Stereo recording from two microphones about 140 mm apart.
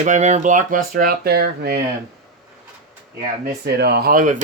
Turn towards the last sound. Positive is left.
turn(degrees=-75)  # may be behind; listen again after turning